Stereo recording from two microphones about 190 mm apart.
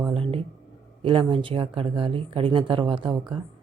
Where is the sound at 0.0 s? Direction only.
30° right (ahead or behind).